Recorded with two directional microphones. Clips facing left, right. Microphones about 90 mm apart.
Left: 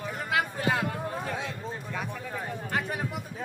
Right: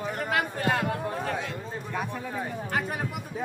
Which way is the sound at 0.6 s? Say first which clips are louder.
Right 1 dB; 10° left (ahead or behind).